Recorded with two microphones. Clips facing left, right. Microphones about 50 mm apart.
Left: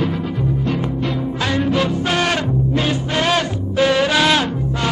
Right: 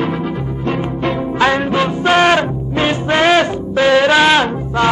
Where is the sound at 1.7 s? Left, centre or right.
Right.